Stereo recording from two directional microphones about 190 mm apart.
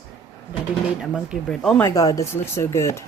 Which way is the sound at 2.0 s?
20° left (ahead or behind).